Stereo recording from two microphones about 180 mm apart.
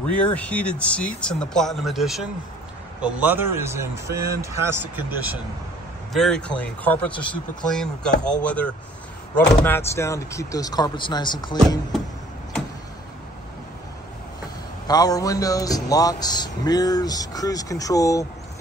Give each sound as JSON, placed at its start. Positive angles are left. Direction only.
{"t": 0.2, "sound": "speech", "side_deg": 5}
{"t": 6.1, "sound": "a man's voice", "side_deg": 5}
{"t": 14.9, "sound": "a man's voice", "side_deg": 20}